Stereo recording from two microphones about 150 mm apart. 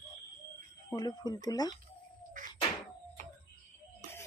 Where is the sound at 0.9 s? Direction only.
25° left (ahead or behind).